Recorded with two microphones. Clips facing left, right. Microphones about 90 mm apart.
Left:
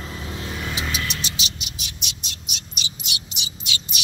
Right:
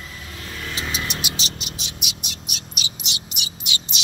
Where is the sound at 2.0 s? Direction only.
10° right (ahead or behind).